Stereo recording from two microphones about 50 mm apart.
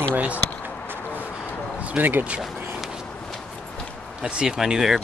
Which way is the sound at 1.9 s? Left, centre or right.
Right.